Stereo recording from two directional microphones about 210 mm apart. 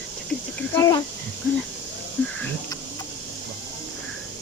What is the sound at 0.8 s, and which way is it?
Speech, 20° left (ahead or behind).